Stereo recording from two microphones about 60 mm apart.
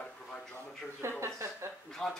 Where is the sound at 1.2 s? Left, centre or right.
Right.